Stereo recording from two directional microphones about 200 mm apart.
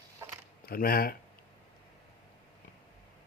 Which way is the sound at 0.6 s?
45° left (ahead or behind).